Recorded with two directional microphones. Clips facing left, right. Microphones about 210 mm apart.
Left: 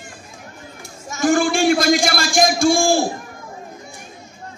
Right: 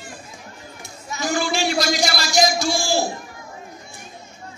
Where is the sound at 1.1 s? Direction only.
50° left (ahead or behind).